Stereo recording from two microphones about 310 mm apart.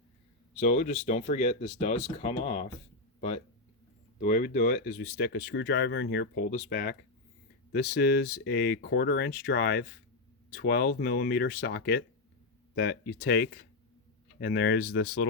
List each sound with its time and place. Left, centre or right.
0.6 s speech: left